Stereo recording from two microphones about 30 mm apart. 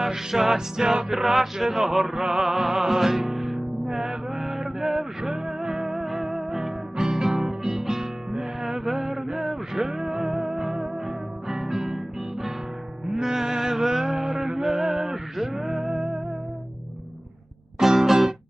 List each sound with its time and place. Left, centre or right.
0.0 s music: centre
1.1 s a sound: centre
1.5 s music: centre
2.2 s music: right
3.9 s mantra: centre
5.2 s music: centre
13.1 s music: centre
17.7 s music: centre